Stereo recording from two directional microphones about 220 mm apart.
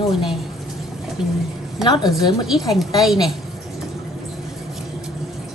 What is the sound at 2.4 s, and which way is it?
Speech, centre (ahead or behind).